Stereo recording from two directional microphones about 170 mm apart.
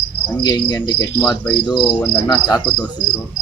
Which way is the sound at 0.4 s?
25° left (ahead or behind).